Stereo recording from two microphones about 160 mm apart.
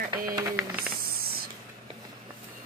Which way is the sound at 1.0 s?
70° right (ahead or behind).